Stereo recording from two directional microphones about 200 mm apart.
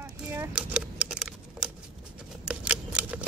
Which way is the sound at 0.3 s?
10° right (ahead or behind).